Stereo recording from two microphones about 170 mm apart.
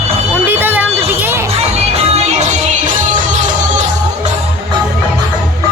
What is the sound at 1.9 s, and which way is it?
Music, 40° right (ahead or behind).